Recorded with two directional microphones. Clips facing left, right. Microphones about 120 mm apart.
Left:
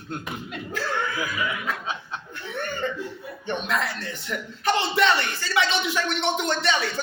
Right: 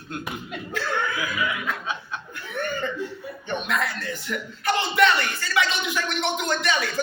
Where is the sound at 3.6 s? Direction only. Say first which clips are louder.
Right 2 dB; 30° left (ahead or behind).